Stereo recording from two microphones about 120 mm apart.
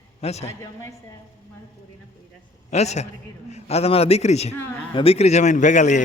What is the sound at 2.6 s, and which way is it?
A man's voice, 65° left (ahead or behind).